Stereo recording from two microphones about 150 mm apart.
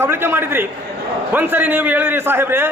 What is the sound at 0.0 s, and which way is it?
A man's voice, 15° right (ahead or behind).